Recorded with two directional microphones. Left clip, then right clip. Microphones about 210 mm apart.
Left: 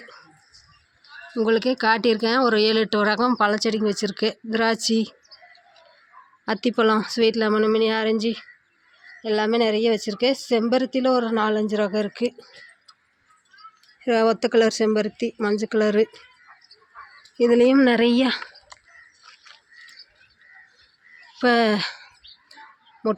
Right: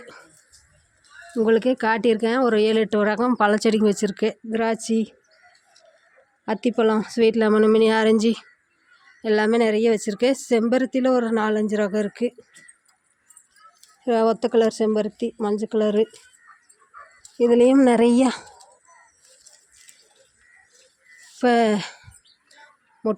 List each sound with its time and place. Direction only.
1.4 s speech: 15° right (ahead or behind)
6.4 s speech: 15° right (ahead or behind)
14.0 s speech: 10° right (ahead or behind)
17.3 s speech: 5° right (ahead or behind)
21.3 s bird: 15° right (ahead or behind)